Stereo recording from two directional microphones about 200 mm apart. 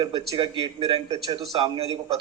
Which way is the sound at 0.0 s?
25° right (ahead or behind).